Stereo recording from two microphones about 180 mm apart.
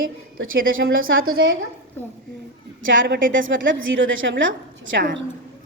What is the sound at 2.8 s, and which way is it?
A woman's voice, 90° right.